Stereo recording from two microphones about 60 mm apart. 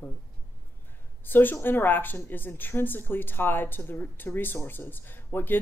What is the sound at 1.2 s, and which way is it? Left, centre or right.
Speech, left.